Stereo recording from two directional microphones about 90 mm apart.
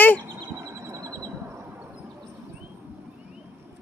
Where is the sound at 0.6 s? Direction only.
25° right (ahead or behind).